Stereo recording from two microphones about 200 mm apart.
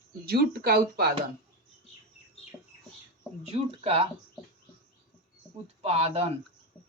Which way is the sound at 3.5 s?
30° right (ahead or behind).